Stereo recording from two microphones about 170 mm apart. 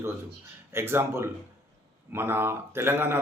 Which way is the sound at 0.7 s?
15° right (ahead or behind).